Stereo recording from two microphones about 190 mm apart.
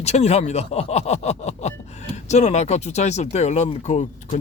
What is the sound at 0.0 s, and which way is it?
Speech, 35° left (ahead or behind).